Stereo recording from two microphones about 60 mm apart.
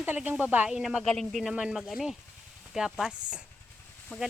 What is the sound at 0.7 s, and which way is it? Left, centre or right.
Speech, centre.